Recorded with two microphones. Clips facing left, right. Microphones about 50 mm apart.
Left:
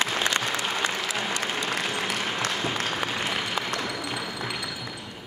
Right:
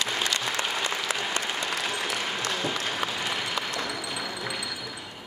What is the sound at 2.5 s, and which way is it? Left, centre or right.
Applause, centre.